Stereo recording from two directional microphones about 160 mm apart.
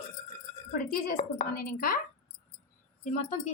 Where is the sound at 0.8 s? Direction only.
65° left (ahead or behind).